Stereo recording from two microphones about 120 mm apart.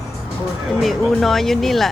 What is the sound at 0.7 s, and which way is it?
Speech, centre (ahead or behind).